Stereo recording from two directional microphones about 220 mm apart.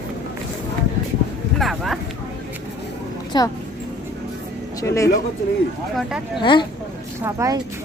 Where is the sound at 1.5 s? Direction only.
Centre (ahead or behind).